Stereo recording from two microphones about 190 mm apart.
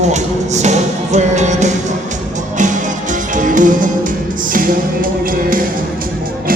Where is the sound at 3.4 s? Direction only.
45° right (ahead or behind).